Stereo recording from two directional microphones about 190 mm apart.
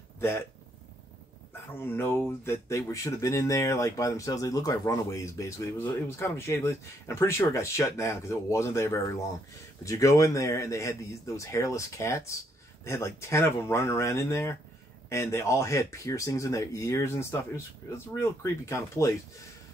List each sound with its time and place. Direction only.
1.7 s speech: 10° left (ahead or behind)